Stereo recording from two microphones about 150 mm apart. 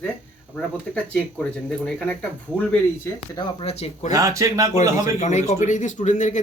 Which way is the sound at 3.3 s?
40° left (ahead or behind).